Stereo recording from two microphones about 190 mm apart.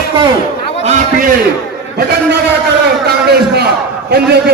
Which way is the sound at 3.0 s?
60° right (ahead or behind).